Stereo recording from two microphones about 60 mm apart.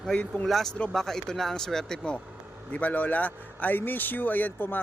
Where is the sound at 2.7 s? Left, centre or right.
Left.